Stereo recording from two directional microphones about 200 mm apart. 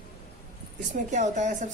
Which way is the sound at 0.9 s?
35° right (ahead or behind).